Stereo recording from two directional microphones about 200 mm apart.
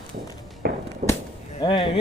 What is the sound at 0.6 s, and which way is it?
Fireworks, 50° right (ahead or behind).